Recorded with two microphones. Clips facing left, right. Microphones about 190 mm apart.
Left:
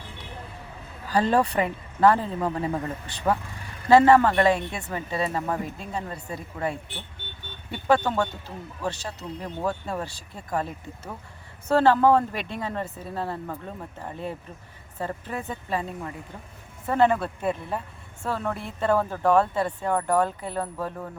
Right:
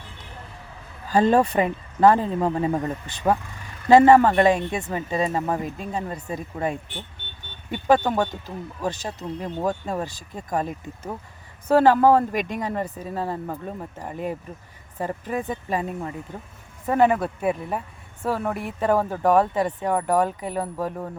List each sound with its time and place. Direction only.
1.1 s speech: 20° right (ahead or behind)